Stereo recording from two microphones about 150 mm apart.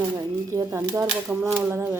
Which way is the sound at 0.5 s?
15° right (ahead or behind).